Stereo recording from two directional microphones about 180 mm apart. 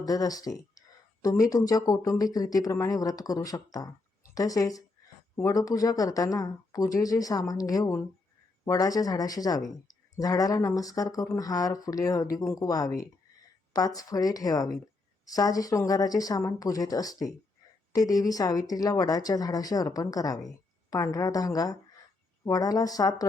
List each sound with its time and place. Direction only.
0.0 s speech: 20° left (ahead or behind)